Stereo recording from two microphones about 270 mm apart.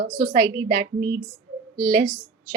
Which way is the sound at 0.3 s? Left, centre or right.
Centre.